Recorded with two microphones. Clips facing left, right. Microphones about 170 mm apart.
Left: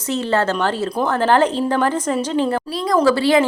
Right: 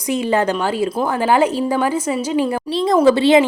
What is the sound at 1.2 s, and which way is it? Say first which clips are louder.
A woman's voice: right 1 dB; 10° right (ahead or behind).